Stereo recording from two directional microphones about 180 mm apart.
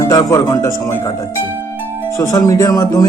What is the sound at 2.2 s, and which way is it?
Speech, 20° left (ahead or behind).